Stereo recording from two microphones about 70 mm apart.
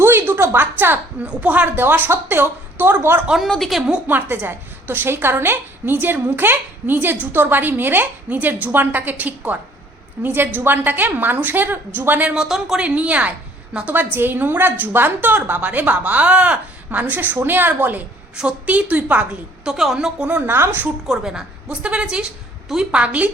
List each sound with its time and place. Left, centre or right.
0.0 s a sound: right
1.2 s a woman's voice: centre
3.6 s a woman's voice: centre
4.0 s a woman's voice: right
12.3 s a woman's voice: centre
19.7 s a woman's voice: centre
20.3 s a woman's voice: right
20.8 s a woman's voice: centre